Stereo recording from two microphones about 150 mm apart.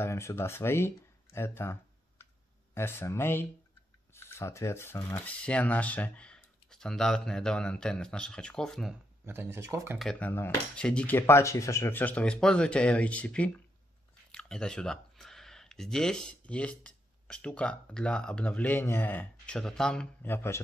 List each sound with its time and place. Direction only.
0.0 s speech: 20° left (ahead or behind)
9.2 s speech: 15° right (ahead or behind)
9.9 s speech: 5° left (ahead or behind)